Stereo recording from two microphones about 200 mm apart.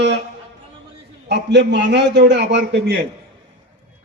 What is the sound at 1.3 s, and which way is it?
A man's voice, 60° right (ahead or behind).